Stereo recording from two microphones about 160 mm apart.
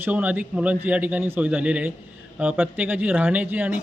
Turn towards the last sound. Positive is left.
turn(degrees=-10)  # may be behind; listen again after turning